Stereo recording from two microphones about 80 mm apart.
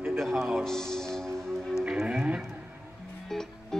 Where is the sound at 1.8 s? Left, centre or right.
Centre.